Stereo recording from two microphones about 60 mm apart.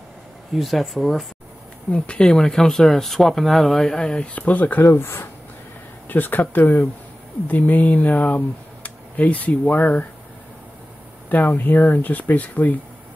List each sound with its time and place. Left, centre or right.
0.6 s speech: centre
1.9 s speech: centre
4.9 s speech: left
11.2 s speech: left